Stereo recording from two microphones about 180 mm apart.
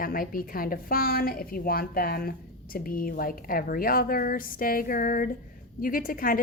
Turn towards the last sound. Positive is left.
turn(degrees=50)  # may be behind; listen again after turning